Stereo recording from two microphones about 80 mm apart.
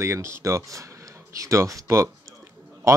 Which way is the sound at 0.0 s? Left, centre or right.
Right.